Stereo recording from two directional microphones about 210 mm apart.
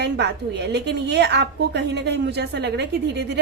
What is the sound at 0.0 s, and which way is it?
A woman's voice, 55° right (ahead or behind).